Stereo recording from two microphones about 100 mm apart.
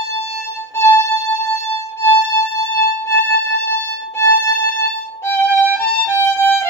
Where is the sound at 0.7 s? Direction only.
30° left (ahead or behind).